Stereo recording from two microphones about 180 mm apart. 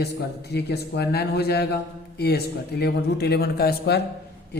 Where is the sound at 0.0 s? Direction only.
65° left (ahead or behind).